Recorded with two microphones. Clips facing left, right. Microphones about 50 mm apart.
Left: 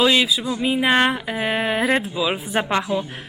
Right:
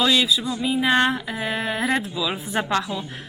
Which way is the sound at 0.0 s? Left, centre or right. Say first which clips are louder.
Left 2 dB; left.